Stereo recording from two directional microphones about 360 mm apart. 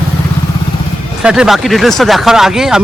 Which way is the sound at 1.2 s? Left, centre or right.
Centre.